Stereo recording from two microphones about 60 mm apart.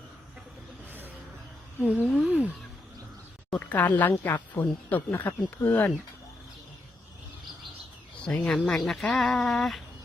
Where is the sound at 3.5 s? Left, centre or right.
Left.